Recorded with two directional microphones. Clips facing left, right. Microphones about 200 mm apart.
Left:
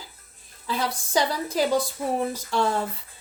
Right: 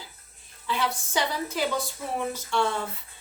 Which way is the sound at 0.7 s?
35° left (ahead or behind).